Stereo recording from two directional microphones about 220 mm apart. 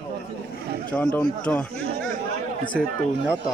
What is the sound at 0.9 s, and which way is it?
Speech, 5° left (ahead or behind).